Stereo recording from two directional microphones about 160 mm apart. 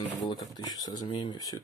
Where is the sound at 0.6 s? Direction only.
25° left (ahead or behind).